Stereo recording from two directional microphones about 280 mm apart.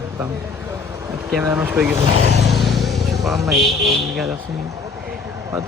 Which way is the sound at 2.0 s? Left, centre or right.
Right.